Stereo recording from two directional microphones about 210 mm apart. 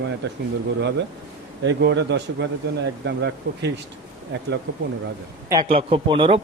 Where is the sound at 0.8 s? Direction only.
55° right (ahead or behind).